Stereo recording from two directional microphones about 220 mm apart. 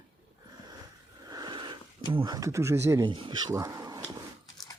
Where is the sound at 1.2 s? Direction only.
20° right (ahead or behind).